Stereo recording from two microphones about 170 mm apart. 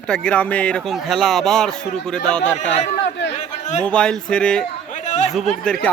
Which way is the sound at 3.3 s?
45° left (ahead or behind).